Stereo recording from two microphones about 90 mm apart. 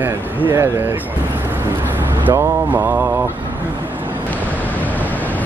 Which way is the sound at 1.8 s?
20° right (ahead or behind).